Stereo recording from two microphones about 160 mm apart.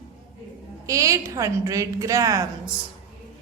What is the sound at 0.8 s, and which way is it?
A woman's voice, 20° right (ahead or behind).